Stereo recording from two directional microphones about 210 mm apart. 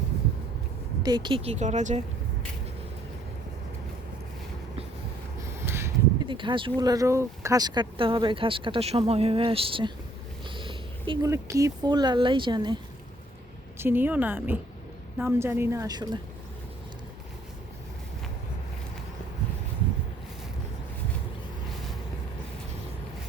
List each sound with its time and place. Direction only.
1.0 s speech: 20° right (ahead or behind)
5.6 s a sound: 10° right (ahead or behind)
6.2 s speech: 25° right (ahead or behind)
13.7 s a woman's voice: 10° right (ahead or behind)